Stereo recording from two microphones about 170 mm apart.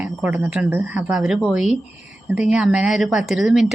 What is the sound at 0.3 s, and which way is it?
Speech, 15° right (ahead or behind).